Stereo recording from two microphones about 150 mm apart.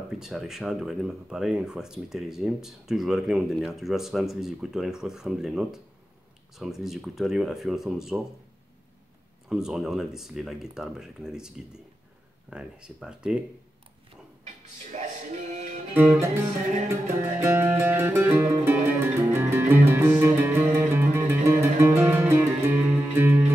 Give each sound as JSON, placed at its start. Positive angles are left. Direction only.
{"t": 0.2, "sound": "speech", "side_deg": 0}
{"t": 9.5, "sound": "speech", "side_deg": -5}
{"t": 14.4, "sound": "a sound", "side_deg": -55}
{"t": 15.5, "sound": "music", "side_deg": -55}
{"t": 16.9, "sound": "music", "side_deg": -15}